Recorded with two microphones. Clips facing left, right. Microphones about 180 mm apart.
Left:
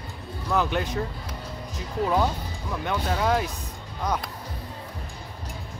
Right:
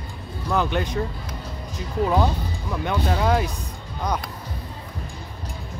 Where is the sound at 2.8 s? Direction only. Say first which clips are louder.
Right 3 dB; centre (ahead or behind).